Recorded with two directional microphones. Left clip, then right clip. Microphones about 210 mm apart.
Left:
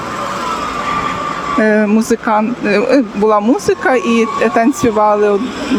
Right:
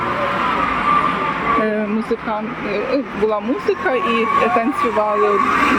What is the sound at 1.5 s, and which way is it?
Speech, 40° left (ahead or behind).